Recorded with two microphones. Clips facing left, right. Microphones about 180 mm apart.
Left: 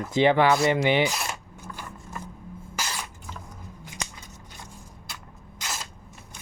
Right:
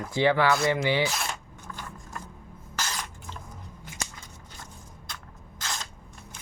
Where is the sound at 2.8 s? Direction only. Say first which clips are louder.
Even; 10° left (ahead or behind).